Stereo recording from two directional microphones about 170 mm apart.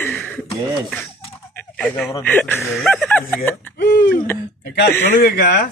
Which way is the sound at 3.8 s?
80° left.